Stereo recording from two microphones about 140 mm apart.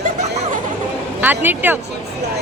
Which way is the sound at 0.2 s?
55° right (ahead or behind).